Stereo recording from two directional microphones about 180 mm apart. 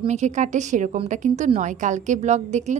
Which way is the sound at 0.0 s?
40° right (ahead or behind).